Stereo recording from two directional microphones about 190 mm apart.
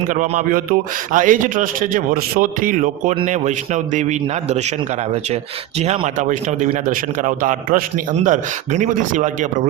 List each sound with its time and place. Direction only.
0.1 s a man's voice: 45° right (ahead or behind)